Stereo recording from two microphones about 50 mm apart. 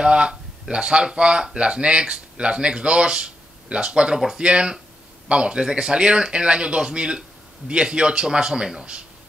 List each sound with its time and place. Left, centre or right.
0.0 s speech: right